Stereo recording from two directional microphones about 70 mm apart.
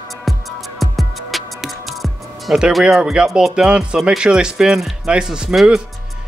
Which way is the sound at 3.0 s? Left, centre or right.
Centre.